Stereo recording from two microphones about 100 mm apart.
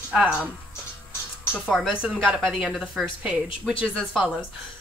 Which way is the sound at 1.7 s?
Centre (ahead or behind).